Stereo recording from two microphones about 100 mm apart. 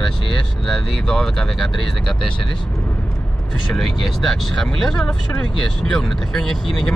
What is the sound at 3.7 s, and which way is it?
Speech, centre (ahead or behind).